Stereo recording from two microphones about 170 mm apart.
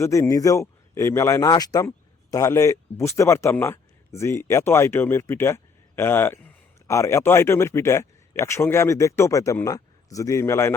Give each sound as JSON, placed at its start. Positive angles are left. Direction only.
{"t": 0.0, "sound": "a man's voice", "side_deg": 15}